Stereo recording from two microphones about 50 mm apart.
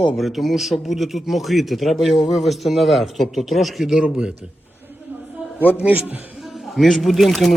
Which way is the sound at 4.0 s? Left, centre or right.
Centre.